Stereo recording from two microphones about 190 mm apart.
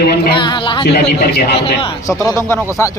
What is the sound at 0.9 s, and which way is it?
Speech, 60° left (ahead or behind).